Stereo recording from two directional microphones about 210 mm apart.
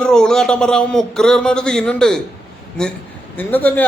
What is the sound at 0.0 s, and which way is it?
A man's voice, 5° left (ahead or behind).